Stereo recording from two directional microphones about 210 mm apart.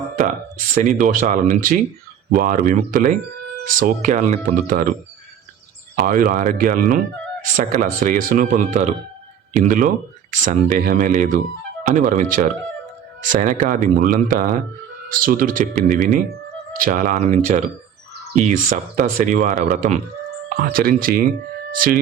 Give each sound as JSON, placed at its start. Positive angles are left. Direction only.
{"t": 0.7, "sound": "speech", "side_deg": -40}
{"t": 6.0, "sound": "speech", "side_deg": -45}